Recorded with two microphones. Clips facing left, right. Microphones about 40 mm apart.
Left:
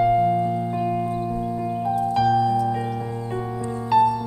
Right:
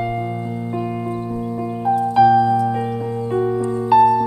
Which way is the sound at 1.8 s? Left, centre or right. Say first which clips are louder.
Right 8 dB; centre.